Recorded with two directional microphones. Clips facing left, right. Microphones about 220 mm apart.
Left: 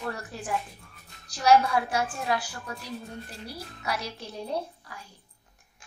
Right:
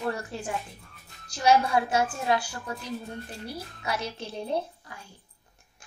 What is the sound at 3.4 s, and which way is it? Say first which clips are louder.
Speech: even; 25° right (ahead or behind).